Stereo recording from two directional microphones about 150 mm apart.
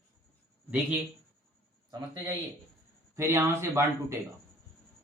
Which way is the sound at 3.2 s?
15° right (ahead or behind).